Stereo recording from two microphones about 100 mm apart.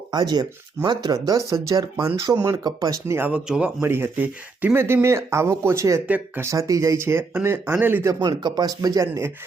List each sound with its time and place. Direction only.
0.1 s speech: 40° right (ahead or behind)
3.2 s speech: 15° right (ahead or behind)
3.8 s speech: 20° right (ahead or behind)
6.1 s speech: 15° right (ahead or behind)
6.4 s speech: 30° right (ahead or behind)
8.0 s speech: 45° right (ahead or behind)